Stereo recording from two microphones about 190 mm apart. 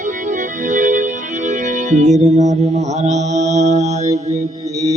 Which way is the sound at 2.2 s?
40° right (ahead or behind).